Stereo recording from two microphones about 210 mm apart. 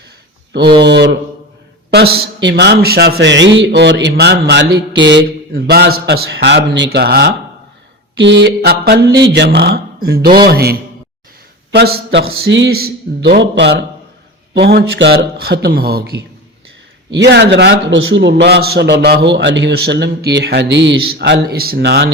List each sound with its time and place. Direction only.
0.9 s a man's voice: 55° right (ahead or behind)